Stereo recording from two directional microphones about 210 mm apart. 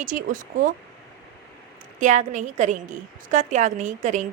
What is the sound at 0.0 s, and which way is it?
Speech, 40° right (ahead or behind).